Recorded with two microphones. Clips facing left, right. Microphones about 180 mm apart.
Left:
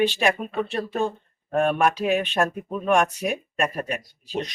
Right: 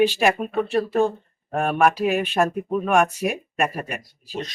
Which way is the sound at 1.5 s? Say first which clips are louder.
Right 1 dB; 5° right (ahead or behind).